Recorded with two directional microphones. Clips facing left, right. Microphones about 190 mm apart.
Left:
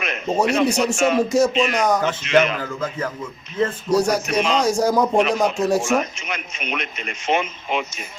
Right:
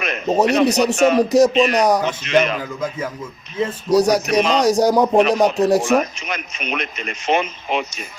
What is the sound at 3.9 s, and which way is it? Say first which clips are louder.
A man's voice: right 5 dB; 35° right (ahead or behind).